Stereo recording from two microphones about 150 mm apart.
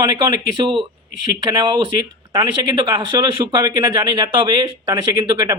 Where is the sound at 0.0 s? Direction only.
30° right (ahead or behind).